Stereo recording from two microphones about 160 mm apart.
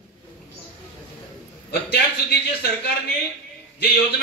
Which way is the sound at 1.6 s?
85° left.